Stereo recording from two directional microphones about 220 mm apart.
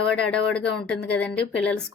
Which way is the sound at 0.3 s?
5° left (ahead or behind).